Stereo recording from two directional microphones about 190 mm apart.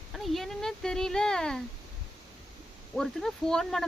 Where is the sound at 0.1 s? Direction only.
Centre (ahead or behind).